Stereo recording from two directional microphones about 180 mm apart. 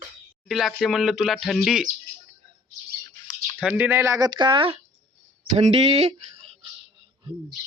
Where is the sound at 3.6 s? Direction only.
10° right (ahead or behind); by 6.6 s 35° right (ahead or behind).